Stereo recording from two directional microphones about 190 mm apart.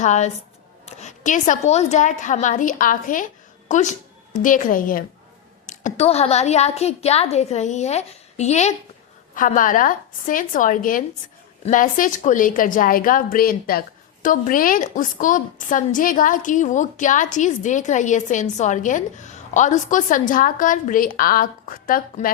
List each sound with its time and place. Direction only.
0.0 s a woman's voice: 40° left (ahead or behind)